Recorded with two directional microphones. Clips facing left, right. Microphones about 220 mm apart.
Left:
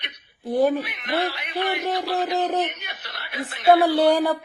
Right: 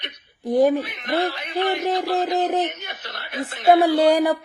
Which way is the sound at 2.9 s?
45° right (ahead or behind).